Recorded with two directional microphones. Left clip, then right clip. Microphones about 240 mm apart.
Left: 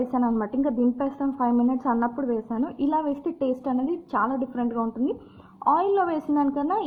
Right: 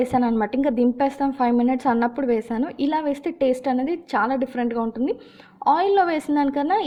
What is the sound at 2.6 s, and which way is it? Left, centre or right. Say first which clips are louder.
A woman's voice: even; right.